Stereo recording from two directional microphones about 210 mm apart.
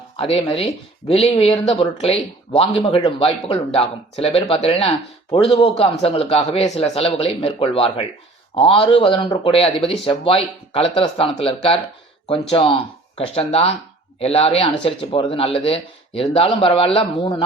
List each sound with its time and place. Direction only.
0.2 s speech: 25° left (ahead or behind)